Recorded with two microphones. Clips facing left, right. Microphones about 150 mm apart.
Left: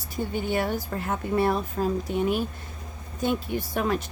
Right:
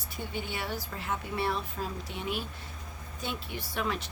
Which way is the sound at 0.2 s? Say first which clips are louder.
Left 10 dB; 45° left (ahead or behind).